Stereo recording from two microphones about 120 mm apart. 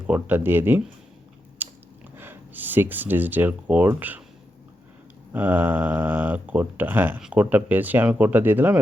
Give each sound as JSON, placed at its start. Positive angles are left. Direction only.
{"t": 0.1, "sound": "speech", "side_deg": -15}
{"t": 1.6, "sound": "chewing", "side_deg": -15}
{"t": 2.1, "sound": "speech", "side_deg": -15}
{"t": 5.3, "sound": "speech", "side_deg": -15}